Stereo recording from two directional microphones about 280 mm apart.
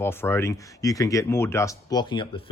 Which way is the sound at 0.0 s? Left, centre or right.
Centre.